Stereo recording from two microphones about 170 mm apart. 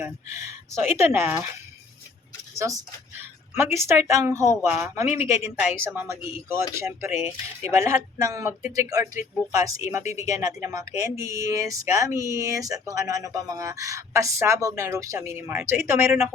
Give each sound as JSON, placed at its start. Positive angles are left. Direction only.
{"t": 0.0, "sound": "speech", "side_deg": -15}
{"t": 2.6, "sound": "a woman's voice", "side_deg": -20}